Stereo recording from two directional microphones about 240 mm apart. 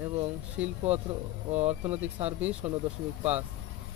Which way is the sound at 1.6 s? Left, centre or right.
Right.